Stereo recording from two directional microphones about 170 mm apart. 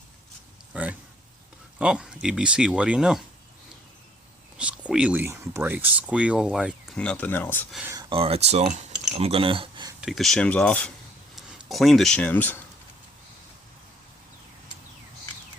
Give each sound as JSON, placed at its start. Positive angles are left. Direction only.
{"t": 0.7, "sound": "speech", "side_deg": -10}
{"t": 4.5, "sound": "speech", "side_deg": -5}
{"t": 7.0, "sound": "speech", "side_deg": 10}
{"t": 8.1, "sound": "speech", "side_deg": -35}
{"t": 10.0, "sound": "speech", "side_deg": 0}